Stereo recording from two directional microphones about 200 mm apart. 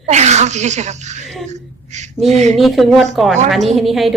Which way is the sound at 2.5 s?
Centre (ahead or behind).